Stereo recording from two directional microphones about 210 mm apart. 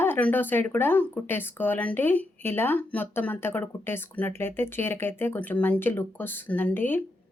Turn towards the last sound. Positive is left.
turn(degrees=10)  # may be behind; listen again after turning